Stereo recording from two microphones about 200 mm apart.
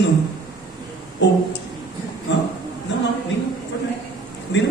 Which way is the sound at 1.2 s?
65° left (ahead or behind).